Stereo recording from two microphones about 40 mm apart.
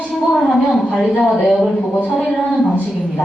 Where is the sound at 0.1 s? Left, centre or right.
Centre.